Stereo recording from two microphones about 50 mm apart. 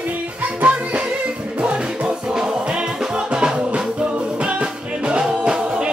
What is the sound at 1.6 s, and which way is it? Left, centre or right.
Music, centre.